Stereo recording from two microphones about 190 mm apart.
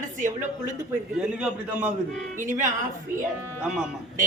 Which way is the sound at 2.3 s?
40° right (ahead or behind).